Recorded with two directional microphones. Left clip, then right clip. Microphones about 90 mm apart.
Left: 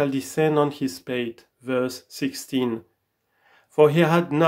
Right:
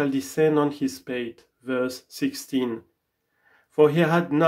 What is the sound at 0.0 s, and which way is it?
Speech, 20° left (ahead or behind).